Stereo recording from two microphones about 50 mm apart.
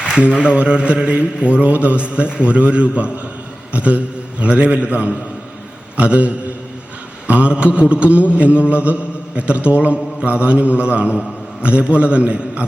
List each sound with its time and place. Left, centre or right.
0.3 s a man's voice: right